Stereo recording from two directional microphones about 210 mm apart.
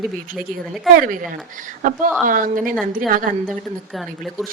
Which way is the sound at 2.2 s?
40° right (ahead or behind).